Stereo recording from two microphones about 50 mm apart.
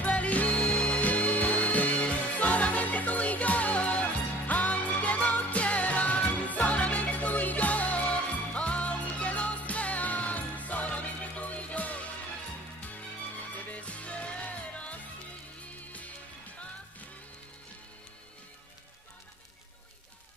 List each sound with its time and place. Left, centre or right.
0.0 s music: left